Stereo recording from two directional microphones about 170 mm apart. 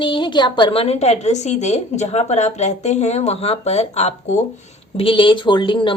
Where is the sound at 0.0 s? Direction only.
30° left (ahead or behind).